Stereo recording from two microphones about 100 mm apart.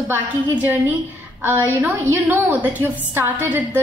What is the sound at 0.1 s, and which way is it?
A woman's voice, 15° right (ahead or behind).